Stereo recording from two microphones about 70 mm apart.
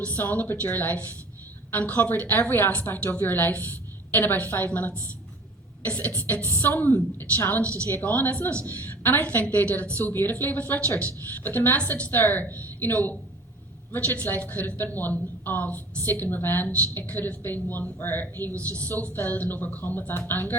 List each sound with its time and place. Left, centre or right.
0.0 s a woman's voice: left